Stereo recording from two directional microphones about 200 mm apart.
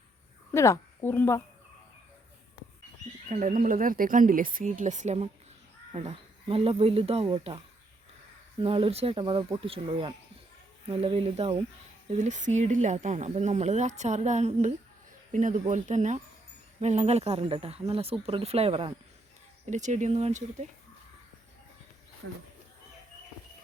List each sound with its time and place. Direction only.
0.5 s a woman's voice: 15° left (ahead or behind)
3.2 s speech: 40° right (ahead or behind)